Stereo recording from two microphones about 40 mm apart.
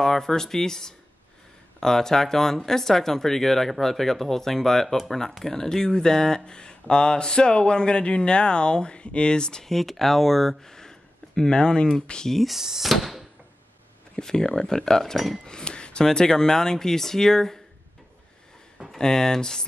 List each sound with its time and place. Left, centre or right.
0.0 s speech: centre
4.8 s speech: centre
5.4 s speech: centre
9.7 s speech: centre; by 11.9 s left
12.3 s speech: centre
12.5 s speech: centre
12.9 s a sound: centre
14.1 s speech: centre
18.9 s speech: centre